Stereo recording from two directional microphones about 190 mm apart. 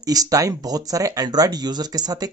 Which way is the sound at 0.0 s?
20° right (ahead or behind).